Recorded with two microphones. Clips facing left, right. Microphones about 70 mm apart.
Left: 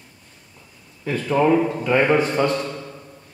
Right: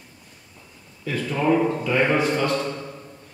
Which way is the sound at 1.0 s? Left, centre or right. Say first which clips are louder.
Left 4 dB; left.